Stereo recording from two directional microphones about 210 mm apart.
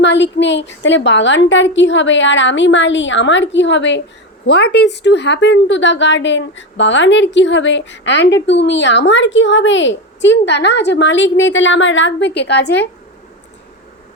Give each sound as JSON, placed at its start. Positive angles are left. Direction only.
{"t": 0.0, "sound": "a woman's voice", "side_deg": 60}